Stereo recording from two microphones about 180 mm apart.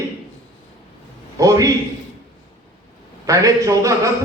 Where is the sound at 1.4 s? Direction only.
20° right (ahead or behind).